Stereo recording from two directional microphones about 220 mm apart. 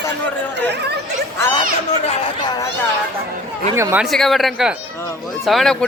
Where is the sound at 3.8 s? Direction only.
10° right (ahead or behind).